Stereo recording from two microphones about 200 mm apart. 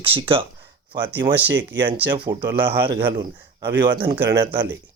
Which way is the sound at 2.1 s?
20° right (ahead or behind).